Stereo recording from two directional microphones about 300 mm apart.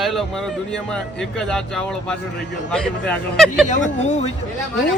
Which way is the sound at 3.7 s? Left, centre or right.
Left.